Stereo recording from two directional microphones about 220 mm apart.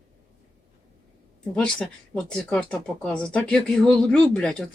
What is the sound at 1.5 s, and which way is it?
Speech, 5° left (ahead or behind).